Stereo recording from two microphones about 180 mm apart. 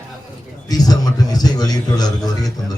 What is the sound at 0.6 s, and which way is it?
Speech, 20° left (ahead or behind).